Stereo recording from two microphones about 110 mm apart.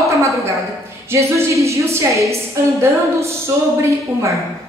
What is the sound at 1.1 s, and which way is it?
A man's voice, 25° right (ahead or behind).